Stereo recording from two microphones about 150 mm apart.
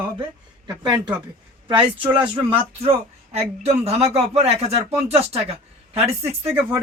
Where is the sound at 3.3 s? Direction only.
45° right (ahead or behind).